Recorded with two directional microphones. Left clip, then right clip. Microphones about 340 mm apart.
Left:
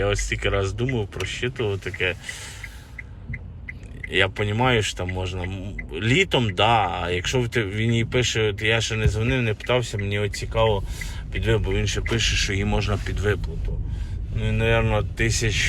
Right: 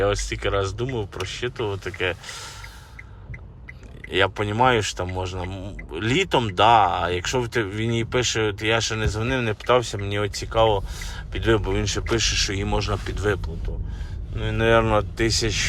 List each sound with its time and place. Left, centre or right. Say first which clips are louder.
0.0 s speech: right 1 dB; centre
4.1 s speech: even; centre